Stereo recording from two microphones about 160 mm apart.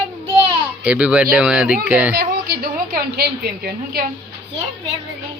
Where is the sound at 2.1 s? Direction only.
75° right (ahead or behind).